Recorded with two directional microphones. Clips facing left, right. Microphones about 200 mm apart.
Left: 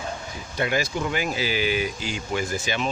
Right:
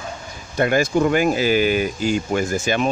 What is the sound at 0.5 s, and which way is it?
Speech, 50° right (ahead or behind).